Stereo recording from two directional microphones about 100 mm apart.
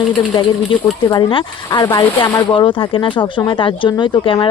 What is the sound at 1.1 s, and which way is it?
Speech, 45° left (ahead or behind).